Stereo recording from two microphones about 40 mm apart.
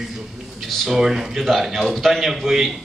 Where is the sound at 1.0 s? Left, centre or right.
Centre.